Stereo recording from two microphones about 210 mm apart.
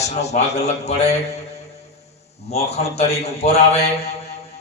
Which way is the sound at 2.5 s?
30° left (ahead or behind).